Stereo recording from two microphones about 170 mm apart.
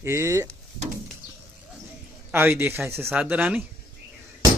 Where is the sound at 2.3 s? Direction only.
15° right (ahead or behind).